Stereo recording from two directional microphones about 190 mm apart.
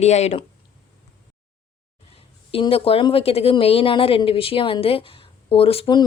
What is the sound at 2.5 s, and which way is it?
A woman's voice, 30° left (ahead or behind).